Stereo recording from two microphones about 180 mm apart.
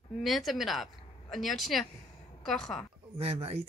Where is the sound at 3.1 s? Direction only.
35° right (ahead or behind).